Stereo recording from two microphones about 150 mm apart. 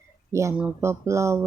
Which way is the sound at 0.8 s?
20° right (ahead or behind).